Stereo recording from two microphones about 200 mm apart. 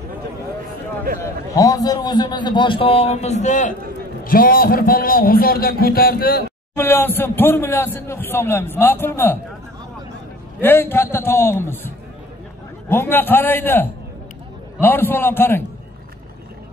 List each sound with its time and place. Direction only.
1.2 s a man's voice: 15° left (ahead or behind); by 6.4 s 50° left (ahead or behind)
6.7 s speech: 10° left (ahead or behind)
10.6 s speech: 10° left (ahead or behind)